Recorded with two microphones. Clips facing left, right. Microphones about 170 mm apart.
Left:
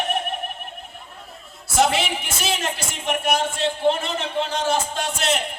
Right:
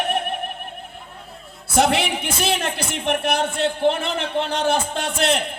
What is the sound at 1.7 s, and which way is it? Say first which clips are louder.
Speech: right 2 dB; 60° right (ahead or behind).